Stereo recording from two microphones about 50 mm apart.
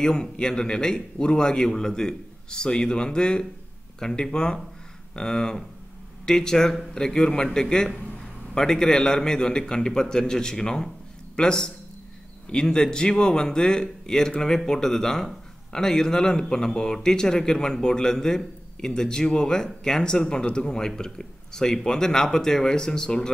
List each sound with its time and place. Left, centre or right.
0.0 s a man's voice: centre